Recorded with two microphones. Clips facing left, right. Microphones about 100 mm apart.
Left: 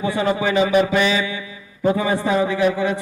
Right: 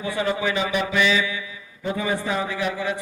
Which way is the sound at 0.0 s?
30° left (ahead or behind).